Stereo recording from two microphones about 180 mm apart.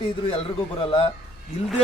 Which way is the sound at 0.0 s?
30° left (ahead or behind).